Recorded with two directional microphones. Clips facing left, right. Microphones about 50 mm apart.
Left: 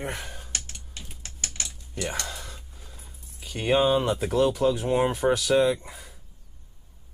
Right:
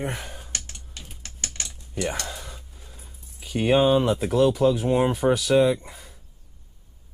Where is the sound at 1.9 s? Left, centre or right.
Right.